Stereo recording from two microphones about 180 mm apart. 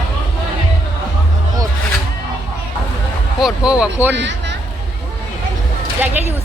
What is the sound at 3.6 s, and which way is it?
Speech, 5° right (ahead or behind).